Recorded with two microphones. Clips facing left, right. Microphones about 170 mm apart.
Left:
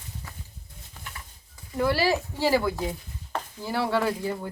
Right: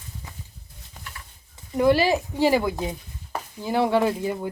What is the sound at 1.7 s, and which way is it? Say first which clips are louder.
Speech: right 5 dB; 20° right (ahead or behind).